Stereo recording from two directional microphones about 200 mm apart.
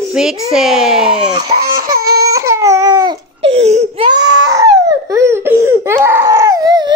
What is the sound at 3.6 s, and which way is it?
Crying, 30° right (ahead or behind).